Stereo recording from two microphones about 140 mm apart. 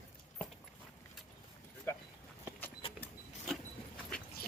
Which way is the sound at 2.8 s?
40° left (ahead or behind).